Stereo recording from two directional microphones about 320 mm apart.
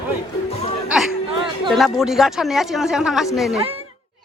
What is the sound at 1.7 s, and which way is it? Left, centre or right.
Speech, centre.